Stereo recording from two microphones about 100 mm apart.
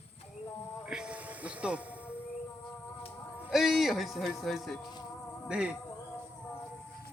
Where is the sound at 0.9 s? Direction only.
10° right (ahead or behind).